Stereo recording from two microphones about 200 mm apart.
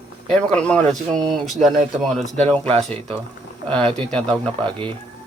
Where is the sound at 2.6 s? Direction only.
30° right (ahead or behind).